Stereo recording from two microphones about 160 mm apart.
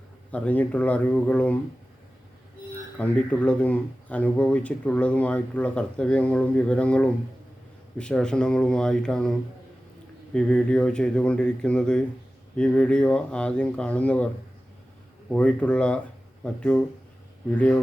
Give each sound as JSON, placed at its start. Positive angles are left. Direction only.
{"t": 0.3, "sound": "speech", "side_deg": 10}
{"t": 3.0, "sound": "speech", "side_deg": 5}
{"t": 10.3, "sound": "speech", "side_deg": 5}
{"t": 15.3, "sound": "speech", "side_deg": 5}